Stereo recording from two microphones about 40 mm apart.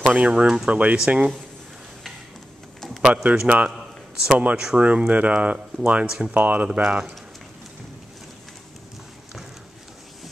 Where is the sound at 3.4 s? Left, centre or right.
Right.